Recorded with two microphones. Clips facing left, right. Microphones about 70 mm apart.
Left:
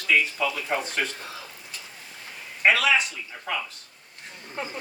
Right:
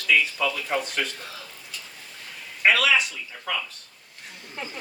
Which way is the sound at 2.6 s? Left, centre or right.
Left.